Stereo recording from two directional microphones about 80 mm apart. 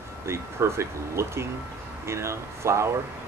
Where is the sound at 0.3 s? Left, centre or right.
Right.